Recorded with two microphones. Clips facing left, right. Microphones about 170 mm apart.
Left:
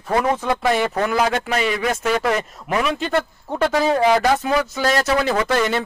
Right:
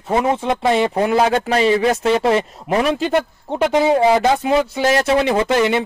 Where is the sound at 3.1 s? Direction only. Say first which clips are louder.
Right 3 dB; 20° right (ahead or behind).